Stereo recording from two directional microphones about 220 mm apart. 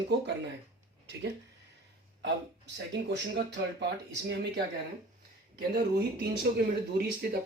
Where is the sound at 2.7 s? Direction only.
50° right (ahead or behind).